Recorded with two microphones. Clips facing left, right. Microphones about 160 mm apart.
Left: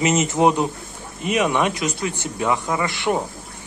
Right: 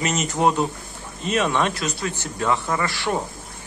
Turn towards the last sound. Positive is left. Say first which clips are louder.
# left 2 dB
turn(degrees=20)  # may be behind; listen again after turning